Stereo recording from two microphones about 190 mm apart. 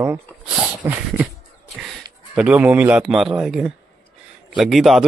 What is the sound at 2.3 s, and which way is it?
A man's voice, 5° right (ahead or behind).